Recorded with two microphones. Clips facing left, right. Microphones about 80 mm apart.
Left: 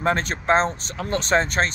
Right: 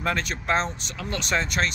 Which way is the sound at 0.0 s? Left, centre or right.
Left.